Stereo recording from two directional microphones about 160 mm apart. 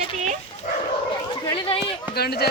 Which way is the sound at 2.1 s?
80° left.